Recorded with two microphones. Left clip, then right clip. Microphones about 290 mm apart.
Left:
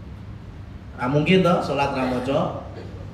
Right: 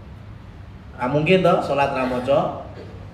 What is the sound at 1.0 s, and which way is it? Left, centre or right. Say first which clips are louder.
A man's voice: right 2 dB; right.